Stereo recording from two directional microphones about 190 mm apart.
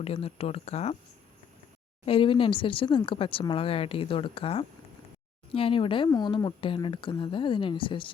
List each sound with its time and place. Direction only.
0.0 s speech: 30° left (ahead or behind)
2.0 s speech: 30° left (ahead or behind)